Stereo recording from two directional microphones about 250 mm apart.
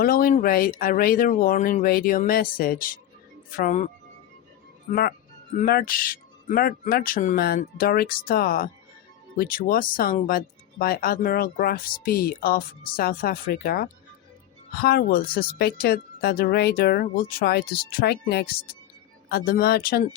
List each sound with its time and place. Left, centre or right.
0.0 s speech: left